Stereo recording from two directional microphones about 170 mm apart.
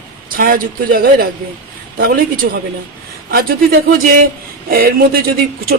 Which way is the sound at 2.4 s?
60° right (ahead or behind).